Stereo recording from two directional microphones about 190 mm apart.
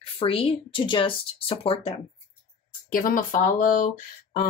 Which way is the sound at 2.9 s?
45° left (ahead or behind).